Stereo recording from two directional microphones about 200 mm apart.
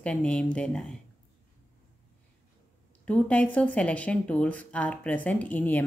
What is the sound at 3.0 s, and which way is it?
Speech, 5° left (ahead or behind).